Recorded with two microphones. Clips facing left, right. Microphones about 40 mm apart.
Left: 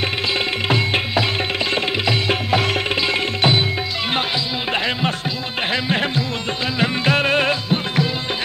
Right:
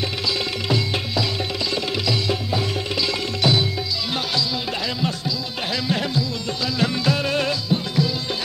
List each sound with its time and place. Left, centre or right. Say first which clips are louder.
0.3 s music: left 2 dB; left
2.5 s music: left 6 dB; left
3.0 s music: left 1 dB; left
4.7 s music: left 4 dB; left